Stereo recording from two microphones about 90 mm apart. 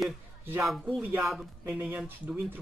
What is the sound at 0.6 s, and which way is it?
Speech, centre (ahead or behind).